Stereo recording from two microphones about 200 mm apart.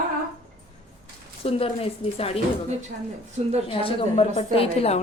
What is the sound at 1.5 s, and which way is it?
Speech, 30° left (ahead or behind).